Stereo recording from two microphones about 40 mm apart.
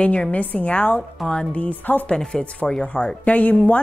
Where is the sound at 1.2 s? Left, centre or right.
Centre.